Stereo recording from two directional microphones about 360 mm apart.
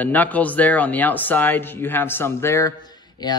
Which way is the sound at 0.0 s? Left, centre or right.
Centre.